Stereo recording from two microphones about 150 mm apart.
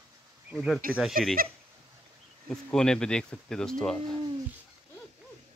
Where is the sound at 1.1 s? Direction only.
75° right (ahead or behind).